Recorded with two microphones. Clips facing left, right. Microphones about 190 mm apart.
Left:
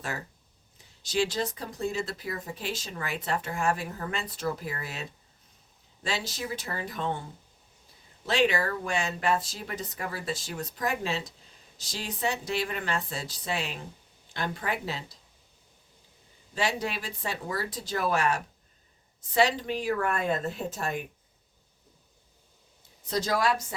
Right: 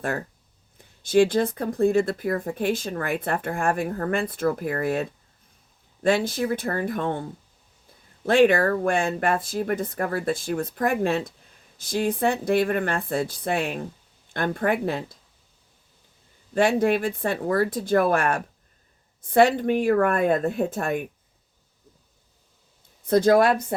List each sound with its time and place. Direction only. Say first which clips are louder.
0.8 s speech: right 10 dB; 55° right (ahead or behind)
16.6 s speech: right 11 dB; 55° right (ahead or behind)
23.0 s speech: right 10 dB; 55° right (ahead or behind)